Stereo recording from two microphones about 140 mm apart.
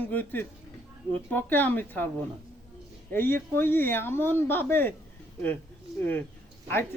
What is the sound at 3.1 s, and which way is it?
Speech, 15° left (ahead or behind).